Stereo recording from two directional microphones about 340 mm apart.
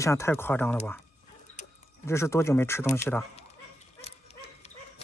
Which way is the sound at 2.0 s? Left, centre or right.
Centre.